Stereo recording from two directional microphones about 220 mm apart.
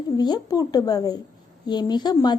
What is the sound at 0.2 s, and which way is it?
A woman's voice, 20° left (ahead or behind).